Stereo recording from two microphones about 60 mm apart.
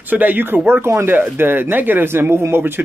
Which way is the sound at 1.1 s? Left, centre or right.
Right.